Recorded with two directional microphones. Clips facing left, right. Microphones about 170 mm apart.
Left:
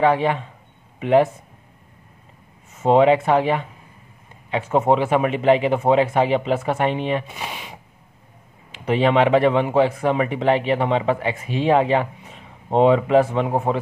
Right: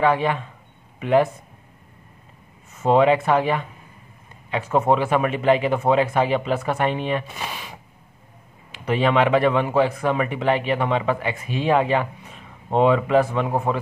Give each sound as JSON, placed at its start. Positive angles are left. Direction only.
{"t": 0.0, "sound": "speech", "side_deg": 25}
{"t": 2.8, "sound": "speech", "side_deg": 25}